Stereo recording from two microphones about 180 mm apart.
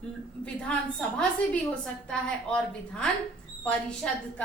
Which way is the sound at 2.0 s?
5° left (ahead or behind).